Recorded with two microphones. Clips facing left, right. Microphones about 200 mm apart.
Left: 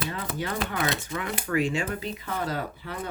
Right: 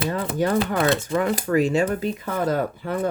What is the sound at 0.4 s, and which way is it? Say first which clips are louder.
Speech: right 9 dB; 45° right (ahead or behind).